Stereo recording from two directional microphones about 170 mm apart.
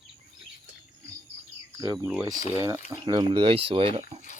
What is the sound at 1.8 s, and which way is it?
Speech, 20° right (ahead or behind).